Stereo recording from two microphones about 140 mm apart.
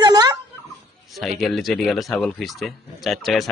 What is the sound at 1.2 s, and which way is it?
Speech, centre (ahead or behind).